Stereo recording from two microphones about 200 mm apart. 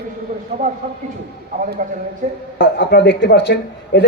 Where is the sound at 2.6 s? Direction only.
60° left (ahead or behind).